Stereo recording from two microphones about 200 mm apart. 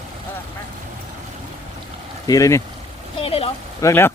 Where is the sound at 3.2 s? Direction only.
30° left (ahead or behind).